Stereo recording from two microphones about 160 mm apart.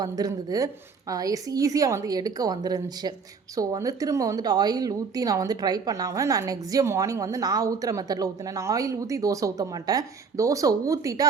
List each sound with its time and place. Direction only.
0.0 s a woman's voice: 25° right (ahead or behind)